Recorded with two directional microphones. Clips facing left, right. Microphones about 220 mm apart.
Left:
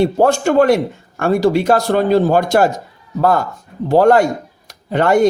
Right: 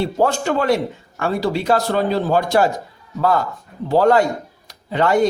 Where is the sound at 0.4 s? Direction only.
50° left (ahead or behind).